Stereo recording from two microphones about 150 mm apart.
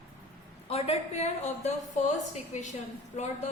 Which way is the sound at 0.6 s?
45° left (ahead or behind).